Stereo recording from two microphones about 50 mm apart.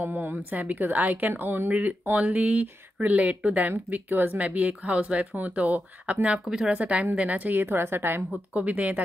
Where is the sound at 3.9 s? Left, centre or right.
Right.